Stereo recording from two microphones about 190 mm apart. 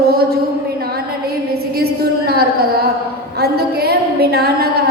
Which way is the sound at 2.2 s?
55° right (ahead or behind).